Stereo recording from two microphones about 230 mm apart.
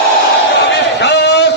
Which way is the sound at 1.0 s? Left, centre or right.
Left.